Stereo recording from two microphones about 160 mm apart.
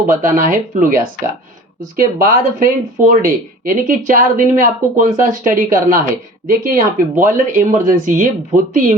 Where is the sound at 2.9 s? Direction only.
60° right (ahead or behind).